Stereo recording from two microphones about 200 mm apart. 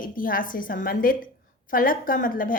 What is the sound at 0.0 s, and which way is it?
A woman's voice, 45° left (ahead or behind).